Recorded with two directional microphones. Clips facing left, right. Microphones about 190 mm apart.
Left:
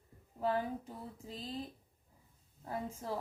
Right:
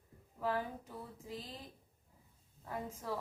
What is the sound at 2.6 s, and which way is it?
Speech, 30° left (ahead or behind).